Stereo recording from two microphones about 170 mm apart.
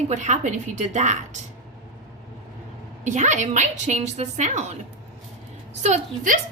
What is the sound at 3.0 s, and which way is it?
A woman's voice, 45° right (ahead or behind).